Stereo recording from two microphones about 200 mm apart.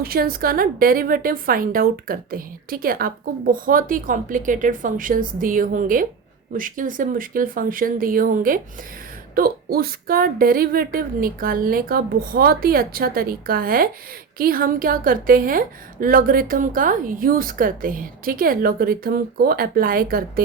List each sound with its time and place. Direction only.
0.0 s a woman's voice: 50° right (ahead or behind)